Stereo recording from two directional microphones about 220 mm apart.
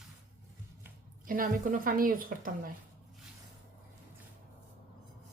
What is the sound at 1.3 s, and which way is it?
A woman's voice, 40° right (ahead or behind).